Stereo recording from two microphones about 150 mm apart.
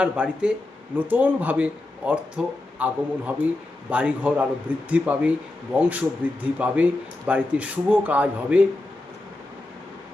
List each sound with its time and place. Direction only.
0.0 s speech: 5° right (ahead or behind)